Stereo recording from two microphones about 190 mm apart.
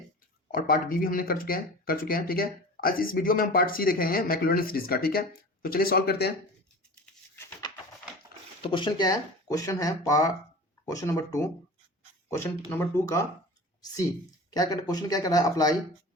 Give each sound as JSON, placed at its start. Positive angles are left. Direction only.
{"t": 0.5, "sound": "speech", "side_deg": 45}
{"t": 8.6, "sound": "speech", "side_deg": 25}
{"t": 12.7, "sound": "speech", "side_deg": 15}
{"t": 14.5, "sound": "speech", "side_deg": 20}